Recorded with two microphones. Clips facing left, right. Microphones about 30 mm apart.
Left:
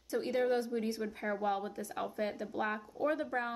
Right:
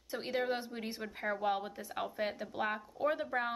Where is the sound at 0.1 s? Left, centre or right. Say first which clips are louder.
Left 3 dB; right.